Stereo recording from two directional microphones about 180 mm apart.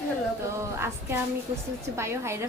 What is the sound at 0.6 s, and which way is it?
Speech, 15° right (ahead or behind).